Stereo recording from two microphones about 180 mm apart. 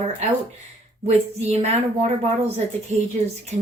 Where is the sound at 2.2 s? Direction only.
35° right (ahead or behind).